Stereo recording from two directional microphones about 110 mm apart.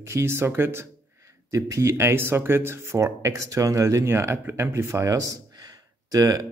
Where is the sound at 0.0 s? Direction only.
25° right (ahead or behind).